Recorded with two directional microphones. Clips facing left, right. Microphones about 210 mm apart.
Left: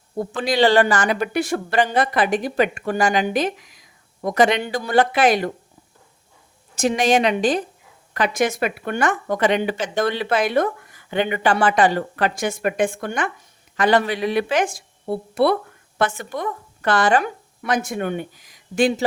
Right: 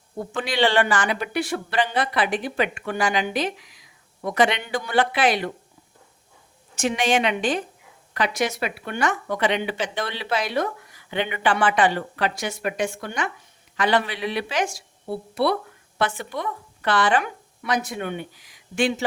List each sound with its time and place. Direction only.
0.2 s speech: 40° left (ahead or behind)
6.7 s a woman's voice: 40° left (ahead or behind)
8.1 s speech: 50° left (ahead or behind)